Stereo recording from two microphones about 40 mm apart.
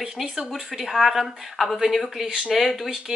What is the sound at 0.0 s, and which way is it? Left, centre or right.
A woman's voice, centre.